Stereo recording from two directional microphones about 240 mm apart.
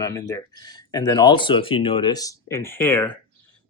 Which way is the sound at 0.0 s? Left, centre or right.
Centre.